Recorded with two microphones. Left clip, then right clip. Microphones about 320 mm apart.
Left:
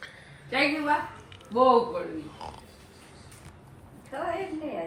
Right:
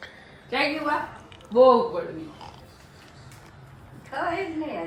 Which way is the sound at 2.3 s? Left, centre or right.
Centre.